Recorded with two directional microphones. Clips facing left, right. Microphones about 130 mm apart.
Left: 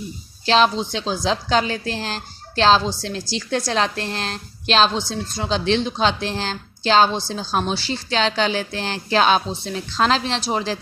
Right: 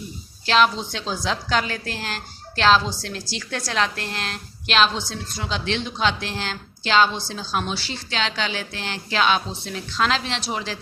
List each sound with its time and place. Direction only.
0.4 s a woman's voice: 30° left (ahead or behind)